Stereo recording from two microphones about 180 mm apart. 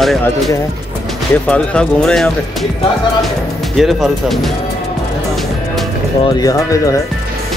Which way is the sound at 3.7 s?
Centre (ahead or behind).